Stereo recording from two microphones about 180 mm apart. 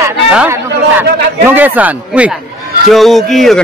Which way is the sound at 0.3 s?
5° right (ahead or behind).